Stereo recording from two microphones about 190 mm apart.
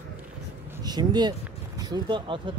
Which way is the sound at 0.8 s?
20° right (ahead or behind).